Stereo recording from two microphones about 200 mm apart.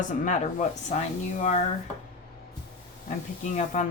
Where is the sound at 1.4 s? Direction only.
35° left (ahead or behind).